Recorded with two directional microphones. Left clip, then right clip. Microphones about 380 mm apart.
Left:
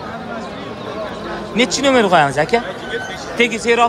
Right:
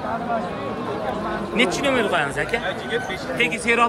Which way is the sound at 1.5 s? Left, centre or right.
Centre.